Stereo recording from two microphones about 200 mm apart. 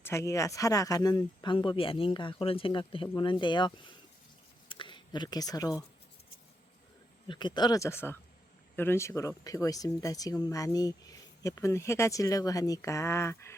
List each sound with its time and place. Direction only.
0.0 s speech: 15° left (ahead or behind)
4.7 s a sound: 25° left (ahead or behind)
7.3 s speech: 20° left (ahead or behind)